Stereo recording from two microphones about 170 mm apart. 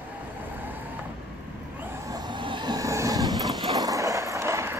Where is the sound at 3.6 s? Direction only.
20° right (ahead or behind).